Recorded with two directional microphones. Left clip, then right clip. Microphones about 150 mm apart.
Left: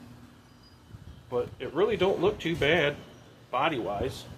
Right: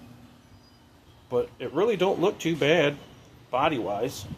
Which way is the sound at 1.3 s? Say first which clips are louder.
Right 4 dB; 60° right (ahead or behind).